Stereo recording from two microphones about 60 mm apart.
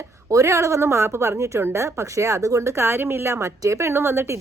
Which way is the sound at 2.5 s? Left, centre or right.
Right.